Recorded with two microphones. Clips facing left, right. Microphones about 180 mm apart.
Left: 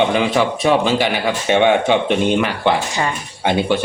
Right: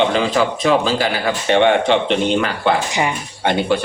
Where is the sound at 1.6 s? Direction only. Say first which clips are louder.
Left 1 dB; 10° left (ahead or behind).